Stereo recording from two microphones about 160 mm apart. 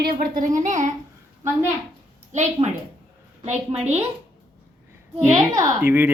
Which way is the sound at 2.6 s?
40° right (ahead or behind).